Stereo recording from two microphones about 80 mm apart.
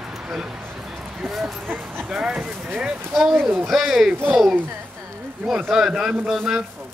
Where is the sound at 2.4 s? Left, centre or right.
Right.